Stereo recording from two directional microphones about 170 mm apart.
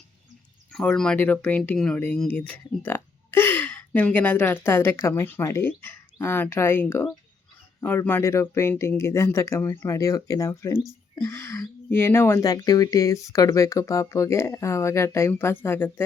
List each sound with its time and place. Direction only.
0.7 s speech: 5° left (ahead or behind)